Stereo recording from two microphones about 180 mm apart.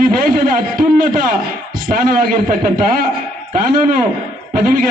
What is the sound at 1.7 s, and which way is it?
A man's voice, 50° right (ahead or behind).